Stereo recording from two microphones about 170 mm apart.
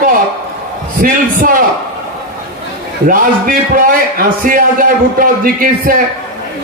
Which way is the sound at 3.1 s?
55° right (ahead or behind).